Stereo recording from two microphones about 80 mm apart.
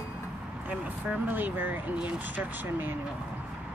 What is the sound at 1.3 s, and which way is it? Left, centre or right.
Speech, right.